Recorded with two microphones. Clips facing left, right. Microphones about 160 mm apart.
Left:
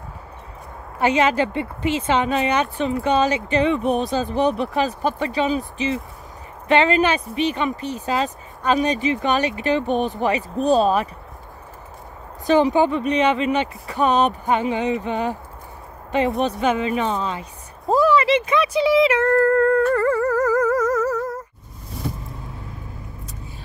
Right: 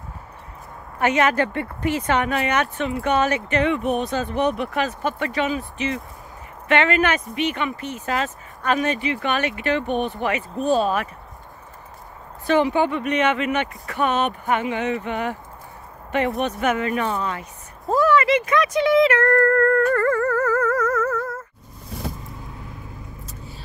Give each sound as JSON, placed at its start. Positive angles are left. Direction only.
{"t": 0.9, "sound": "speech", "side_deg": 30}
{"t": 12.4, "sound": "speech", "side_deg": 35}
{"t": 16.4, "sound": "speech", "side_deg": 25}
{"t": 19.4, "sound": "music", "side_deg": 15}